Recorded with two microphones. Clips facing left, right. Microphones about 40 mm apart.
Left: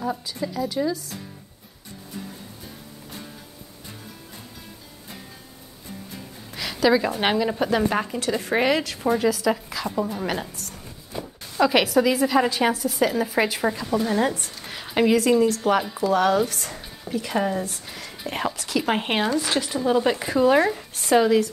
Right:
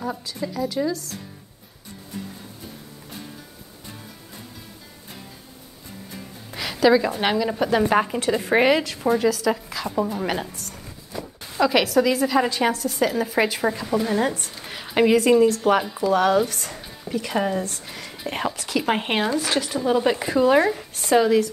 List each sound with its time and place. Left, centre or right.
0.0 s speech: centre
6.5 s a sound: centre
7.2 s speech: centre
7.5 s speech: centre
7.9 s a woman's voice: centre